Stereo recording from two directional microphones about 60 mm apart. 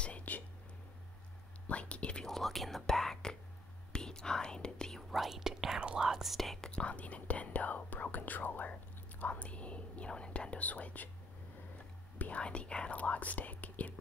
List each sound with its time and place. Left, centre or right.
0.0 s whispering: left
1.7 s whispering: left
2.2 s whispering: centre
5.1 s whispering: centre; by 11.1 s left
12.2 s whispering: left